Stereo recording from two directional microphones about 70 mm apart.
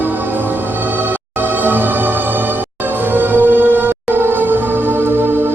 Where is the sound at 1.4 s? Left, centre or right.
Right.